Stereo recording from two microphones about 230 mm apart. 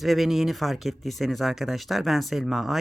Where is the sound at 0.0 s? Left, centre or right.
Centre.